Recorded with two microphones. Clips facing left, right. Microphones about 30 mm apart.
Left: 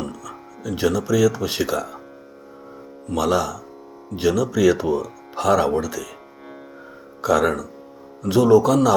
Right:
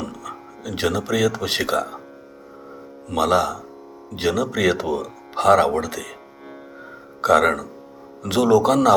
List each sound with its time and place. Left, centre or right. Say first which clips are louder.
0.1 s music: right 1 dB; right
0.8 s speech: left 2 dB; right
1.4 s speech: even; right
1.6 s speech: right 2 dB; right
3.2 s speech: right 2 dB; right
4.2 s speech: left 2 dB; right
4.9 s speech: right 1 dB; right
7.2 s speech: right 2 dB; right
8.2 s speech: left 2 dB; right
8.6 s speech: right 1 dB; right